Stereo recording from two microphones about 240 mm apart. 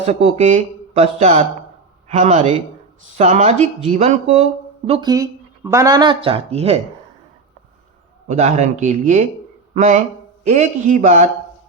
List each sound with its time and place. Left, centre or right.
0.0 s speech: right
8.3 s speech: right